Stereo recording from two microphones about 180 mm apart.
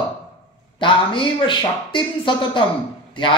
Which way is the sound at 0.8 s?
25° left (ahead or behind).